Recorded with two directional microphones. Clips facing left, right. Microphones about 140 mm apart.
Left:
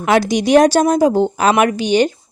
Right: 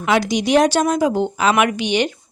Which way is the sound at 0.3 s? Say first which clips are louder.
Left 5 dB; 45° left (ahead or behind).